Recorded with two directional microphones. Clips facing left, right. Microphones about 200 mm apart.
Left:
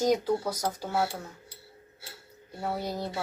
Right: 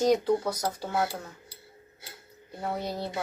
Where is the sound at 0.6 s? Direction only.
5° right (ahead or behind).